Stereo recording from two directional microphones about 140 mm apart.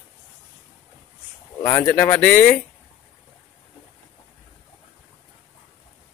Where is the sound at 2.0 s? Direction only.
15° left (ahead or behind).